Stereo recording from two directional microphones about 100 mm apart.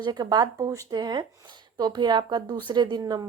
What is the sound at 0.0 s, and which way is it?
Speech, 45° right (ahead or behind).